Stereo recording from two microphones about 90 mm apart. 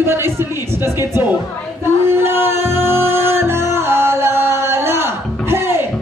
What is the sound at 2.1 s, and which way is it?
Music, 30° right (ahead or behind).